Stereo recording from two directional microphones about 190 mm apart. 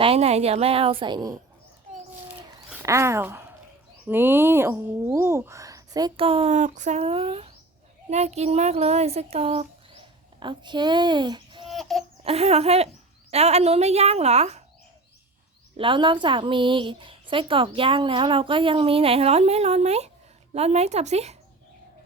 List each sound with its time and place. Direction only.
0.0 s a woman's voice: 30° right (ahead or behind)
2.8 s speech: 15° right (ahead or behind)
11.7 s a sound: centre (ahead or behind)
12.2 s a woman's voice: 30° right (ahead or behind)
15.8 s a woman's voice: 25° right (ahead or behind)